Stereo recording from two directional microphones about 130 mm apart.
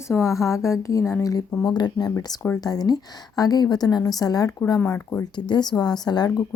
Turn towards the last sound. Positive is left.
turn(degrees=30)  # may be behind; listen again after turning